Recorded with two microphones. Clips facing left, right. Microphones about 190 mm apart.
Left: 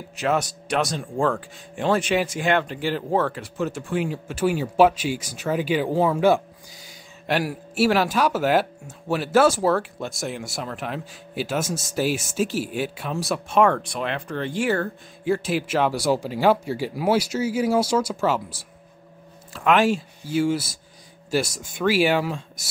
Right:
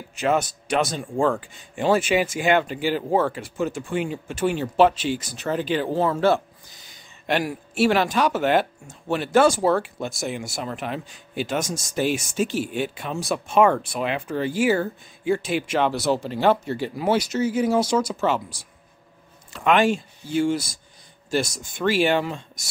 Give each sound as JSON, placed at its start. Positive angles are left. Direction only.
{"t": 0.1, "sound": "speech", "side_deg": 0}